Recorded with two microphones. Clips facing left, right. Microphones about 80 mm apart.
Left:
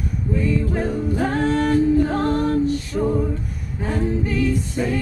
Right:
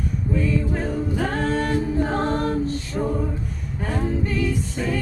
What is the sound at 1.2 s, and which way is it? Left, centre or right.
Singing, centre.